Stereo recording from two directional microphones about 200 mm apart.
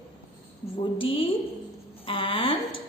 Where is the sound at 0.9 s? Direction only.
25° left (ahead or behind).